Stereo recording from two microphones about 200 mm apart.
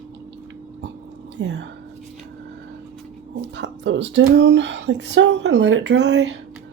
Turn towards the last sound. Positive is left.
turn(degrees=-60)  # may be behind; listen again after turning